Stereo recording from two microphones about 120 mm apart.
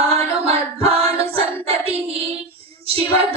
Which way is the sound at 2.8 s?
55° right (ahead or behind).